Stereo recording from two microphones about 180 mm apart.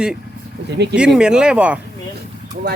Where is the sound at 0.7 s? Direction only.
70° right (ahead or behind).